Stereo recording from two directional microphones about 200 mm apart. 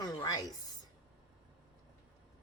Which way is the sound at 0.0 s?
20° left (ahead or behind).